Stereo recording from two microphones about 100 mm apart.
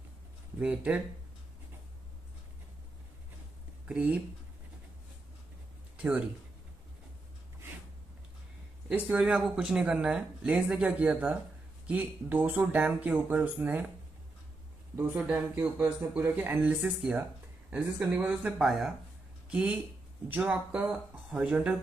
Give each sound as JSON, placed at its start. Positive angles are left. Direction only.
{"t": 0.6, "sound": "speech", "side_deg": -10}
{"t": 3.8, "sound": "speech", "side_deg": -10}
{"t": 5.9, "sound": "speech", "side_deg": -15}
{"t": 8.8, "sound": "speech", "side_deg": -15}
{"t": 11.9, "sound": "speech", "side_deg": -20}
{"t": 15.1, "sound": "speech", "side_deg": -15}
{"t": 18.6, "sound": "speech", "side_deg": 0}